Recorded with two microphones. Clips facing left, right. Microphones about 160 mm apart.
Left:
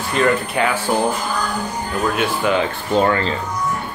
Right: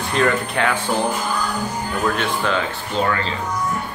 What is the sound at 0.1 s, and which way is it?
Speech, 5° left (ahead or behind).